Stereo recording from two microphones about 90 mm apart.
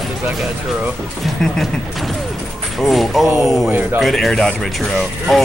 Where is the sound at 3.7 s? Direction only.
20° right (ahead or behind).